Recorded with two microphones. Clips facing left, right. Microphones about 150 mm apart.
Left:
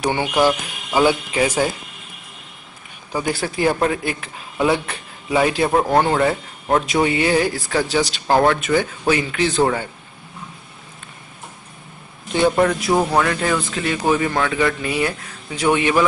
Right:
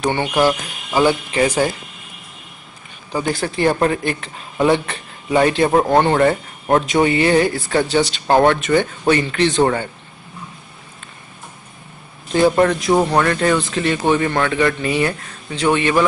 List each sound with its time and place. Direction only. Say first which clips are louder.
0.0 s speech: right 1 dB; 10° left (ahead or behind)
3.1 s speech: right 2 dB; 5° left (ahead or behind)
12.3 s speech: right 2 dB; centre (ahead or behind)